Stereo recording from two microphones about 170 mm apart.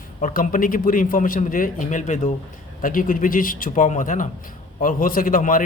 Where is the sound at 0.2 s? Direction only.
55° left (ahead or behind).